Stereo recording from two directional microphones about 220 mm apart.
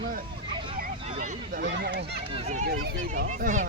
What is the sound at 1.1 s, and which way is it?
Speech, 35° right (ahead or behind).